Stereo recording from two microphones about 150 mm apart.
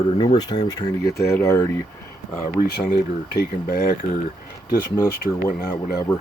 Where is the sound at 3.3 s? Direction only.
90° left.